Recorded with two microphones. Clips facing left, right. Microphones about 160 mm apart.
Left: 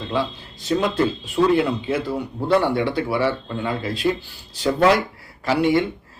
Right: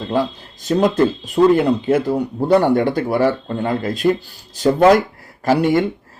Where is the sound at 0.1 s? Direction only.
45° right (ahead or behind).